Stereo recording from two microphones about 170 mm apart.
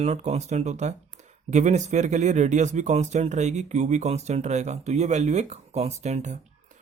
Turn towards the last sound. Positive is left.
turn(degrees=-45)  # may be behind; listen again after turning